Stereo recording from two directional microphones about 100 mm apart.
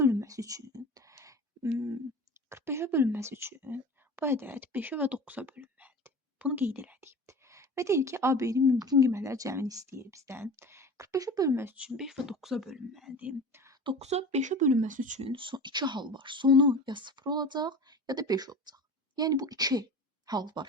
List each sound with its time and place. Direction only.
0.0 s a sound: 30° right (ahead or behind)
2.5 s a woman's voice: 25° right (ahead or behind)
11.9 s speech: 5° right (ahead or behind)
13.5 s speech: 25° right (ahead or behind)
14.0 s speech: 90° right
15.2 s speech: 60° right (ahead or behind)